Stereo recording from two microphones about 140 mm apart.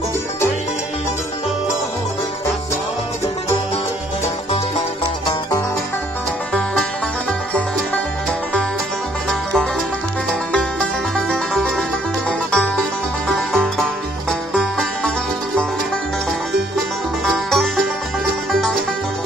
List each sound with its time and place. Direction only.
4.5 s music: 40° left (ahead or behind)
10.5 s music: 5° left (ahead or behind)
17.5 s music: centre (ahead or behind)